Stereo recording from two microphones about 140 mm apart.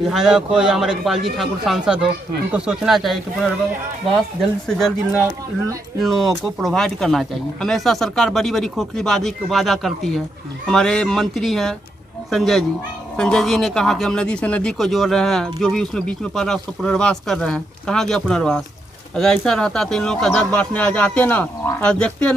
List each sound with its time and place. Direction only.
0.1 s speech: 5° right (ahead or behind)
4.6 s speech: 5° left (ahead or behind)
5.9 s speech: centre (ahead or behind)